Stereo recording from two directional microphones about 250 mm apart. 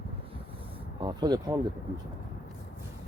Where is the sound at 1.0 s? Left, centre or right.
Centre.